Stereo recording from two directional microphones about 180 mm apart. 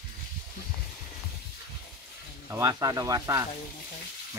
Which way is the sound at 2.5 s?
15° right (ahead or behind).